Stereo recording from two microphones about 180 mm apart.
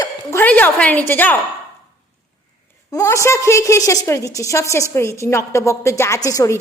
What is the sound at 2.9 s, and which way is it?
A woman's voice, 15° left (ahead or behind).